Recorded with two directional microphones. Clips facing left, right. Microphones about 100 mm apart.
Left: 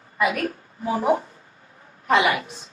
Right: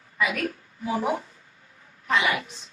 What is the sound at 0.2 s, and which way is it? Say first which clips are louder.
A woman's voice: left 4 dB; 35° left (ahead or behind).